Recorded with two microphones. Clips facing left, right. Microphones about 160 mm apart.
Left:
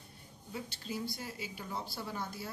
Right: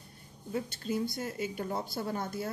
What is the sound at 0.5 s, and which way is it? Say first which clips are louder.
Speech: right 8 dB; 50° right (ahead or behind).